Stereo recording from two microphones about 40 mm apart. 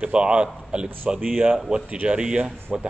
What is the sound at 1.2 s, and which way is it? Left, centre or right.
Speech, right.